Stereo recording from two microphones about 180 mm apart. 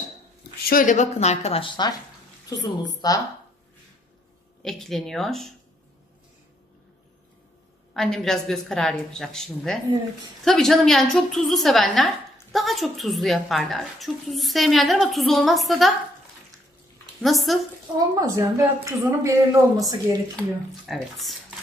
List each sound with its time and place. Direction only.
0.7 s speech: 50° left (ahead or behind); by 3.2 s 20° left (ahead or behind)
4.6 s a woman's voice: centre (ahead or behind)
7.9 s a woman's voice: centre (ahead or behind)
17.2 s a woman's voice: centre (ahead or behind)
17.9 s a woman's voice: 20° right (ahead or behind)
20.3 s a woman's voice: centre (ahead or behind)